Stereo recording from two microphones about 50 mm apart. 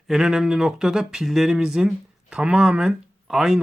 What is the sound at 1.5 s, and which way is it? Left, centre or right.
Speech, centre.